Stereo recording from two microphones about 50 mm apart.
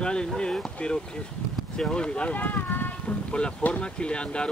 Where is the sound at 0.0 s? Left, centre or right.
Centre.